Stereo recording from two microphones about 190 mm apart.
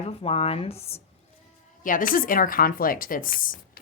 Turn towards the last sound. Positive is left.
turn(degrees=50)  # may be behind; listen again after turning